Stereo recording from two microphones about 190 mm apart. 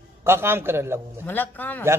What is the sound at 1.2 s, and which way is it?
Speech, 10° left (ahead or behind).